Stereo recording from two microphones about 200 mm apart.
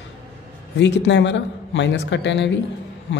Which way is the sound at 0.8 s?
60° left (ahead or behind).